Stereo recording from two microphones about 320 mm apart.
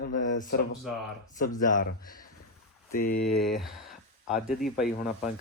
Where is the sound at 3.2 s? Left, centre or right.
Centre.